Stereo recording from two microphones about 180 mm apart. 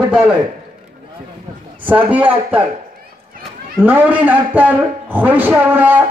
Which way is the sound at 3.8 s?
10° right (ahead or behind).